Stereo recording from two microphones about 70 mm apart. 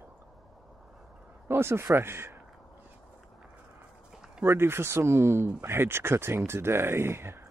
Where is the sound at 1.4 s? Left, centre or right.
Right.